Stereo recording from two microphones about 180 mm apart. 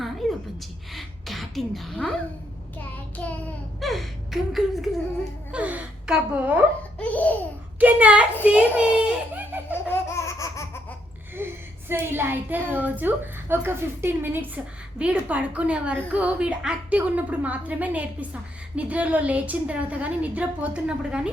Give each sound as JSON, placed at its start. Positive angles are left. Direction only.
{"t": 0.0, "sound": "a sound", "side_deg": 0}
{"t": 0.9, "sound": "speech", "side_deg": 0}
{"t": 2.7, "sound": "child singing", "side_deg": 10}
{"t": 3.8, "sound": "speech", "side_deg": 0}
{"t": 5.5, "sound": "a sound", "side_deg": -5}
{"t": 7.0, "sound": "laughter", "side_deg": 10}
{"t": 7.8, "sound": "a woman's voice", "side_deg": -10}
{"t": 8.4, "sound": "a sound", "side_deg": -10}
{"t": 9.9, "sound": "laughter", "side_deg": 15}
{"t": 11.3, "sound": "a woman's voice", "side_deg": -10}